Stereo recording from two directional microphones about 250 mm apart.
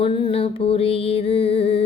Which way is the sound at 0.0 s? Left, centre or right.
Left.